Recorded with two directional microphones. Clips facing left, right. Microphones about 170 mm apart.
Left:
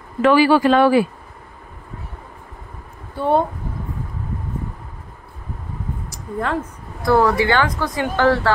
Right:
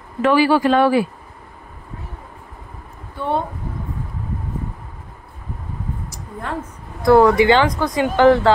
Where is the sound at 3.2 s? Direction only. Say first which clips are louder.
Left 4 dB; 35° left (ahead or behind).